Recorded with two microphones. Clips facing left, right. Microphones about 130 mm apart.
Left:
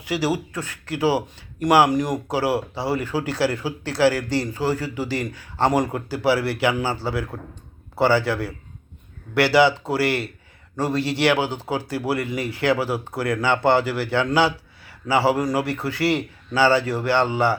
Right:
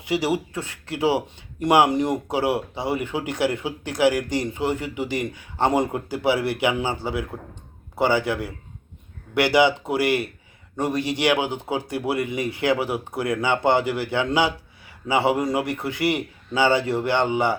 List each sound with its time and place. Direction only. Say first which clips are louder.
0.0 s speech: even; 25° right (ahead or behind)